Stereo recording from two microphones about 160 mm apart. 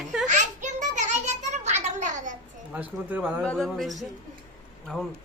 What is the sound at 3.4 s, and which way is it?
Speech, 5° left (ahead or behind).